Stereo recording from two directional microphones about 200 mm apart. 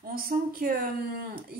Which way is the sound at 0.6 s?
45° right (ahead or behind).